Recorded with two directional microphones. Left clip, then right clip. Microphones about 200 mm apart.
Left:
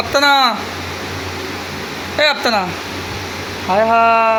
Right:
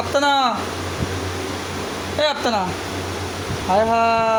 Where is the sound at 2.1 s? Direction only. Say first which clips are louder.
Left 5 dB; 20° left (ahead or behind).